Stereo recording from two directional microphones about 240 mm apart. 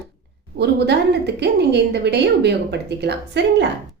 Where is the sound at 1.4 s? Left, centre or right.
Right.